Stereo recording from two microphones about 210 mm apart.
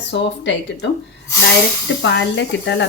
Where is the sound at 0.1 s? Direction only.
55° left (ahead or behind).